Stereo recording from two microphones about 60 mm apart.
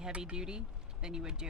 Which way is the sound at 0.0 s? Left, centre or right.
Centre.